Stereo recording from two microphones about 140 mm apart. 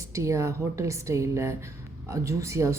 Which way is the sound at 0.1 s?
20° right (ahead or behind).